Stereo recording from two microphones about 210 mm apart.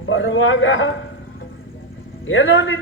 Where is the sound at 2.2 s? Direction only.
70° left (ahead or behind).